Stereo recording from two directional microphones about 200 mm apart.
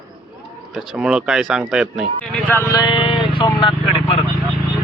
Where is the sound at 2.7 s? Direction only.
25° left (ahead or behind).